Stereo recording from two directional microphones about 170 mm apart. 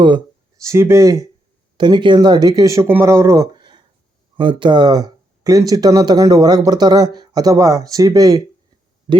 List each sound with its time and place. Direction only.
0.0 s a sound: 30° right (ahead or behind)
0.6 s speech: 15° right (ahead or behind)
1.8 s speech: 25° right (ahead or behind)